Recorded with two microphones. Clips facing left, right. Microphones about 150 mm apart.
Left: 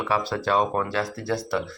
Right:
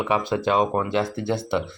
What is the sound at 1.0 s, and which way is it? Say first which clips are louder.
Speech: right 3 dB; 25° right (ahead or behind).